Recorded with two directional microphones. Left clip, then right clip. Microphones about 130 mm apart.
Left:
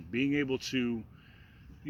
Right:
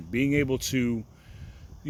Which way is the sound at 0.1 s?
40° right (ahead or behind).